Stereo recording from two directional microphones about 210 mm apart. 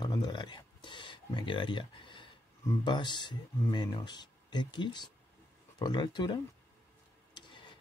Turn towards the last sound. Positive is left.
turn(degrees=20)  # may be behind; listen again after turning